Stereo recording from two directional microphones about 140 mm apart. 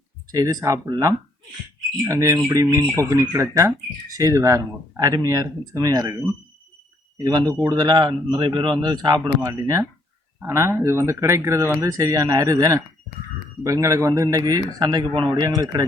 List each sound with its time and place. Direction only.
0.3 s speech: 25° right (ahead or behind)